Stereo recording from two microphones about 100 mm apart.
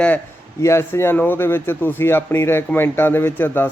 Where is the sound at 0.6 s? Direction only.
25° left (ahead or behind).